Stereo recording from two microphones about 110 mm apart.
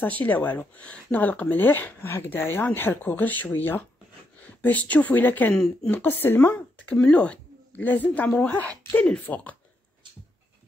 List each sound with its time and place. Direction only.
0.2 s speech: 15° left (ahead or behind)
5.5 s speech: 5° left (ahead or behind)
5.9 s speech: 15° left (ahead or behind)